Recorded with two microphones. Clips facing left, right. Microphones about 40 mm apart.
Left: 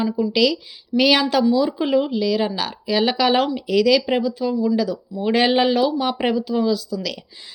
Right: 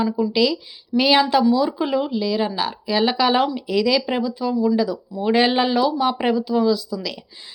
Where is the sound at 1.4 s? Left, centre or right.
Left.